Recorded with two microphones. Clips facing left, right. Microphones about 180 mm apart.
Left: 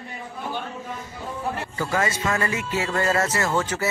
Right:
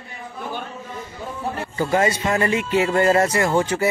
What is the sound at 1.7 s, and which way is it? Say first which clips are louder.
Speech: right 7 dB; 25° right (ahead or behind).